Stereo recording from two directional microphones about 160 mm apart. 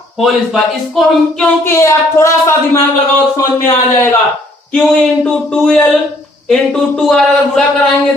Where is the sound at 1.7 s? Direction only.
15° left (ahead or behind).